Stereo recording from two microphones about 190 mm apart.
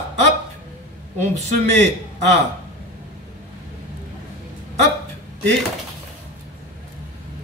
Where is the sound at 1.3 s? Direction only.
35° right (ahead or behind).